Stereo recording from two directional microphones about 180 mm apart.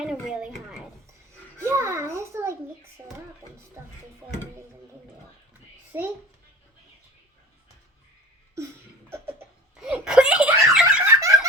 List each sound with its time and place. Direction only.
0.0 s a sound: 5° right (ahead or behind)
1.5 s babbling: 15° right (ahead or behind)
3.0 s a child's voice: 20° right (ahead or behind)
5.9 s a child's voice: 10° right (ahead or behind)
9.0 s cough: 15° right (ahead or behind)
9.8 s a sound: 5° right (ahead or behind)
10.7 s giggle: 5° right (ahead or behind)
11.1 s giggle: 15° right (ahead or behind)